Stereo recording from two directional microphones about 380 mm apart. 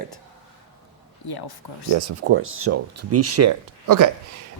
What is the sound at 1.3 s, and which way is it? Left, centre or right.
Speech, left.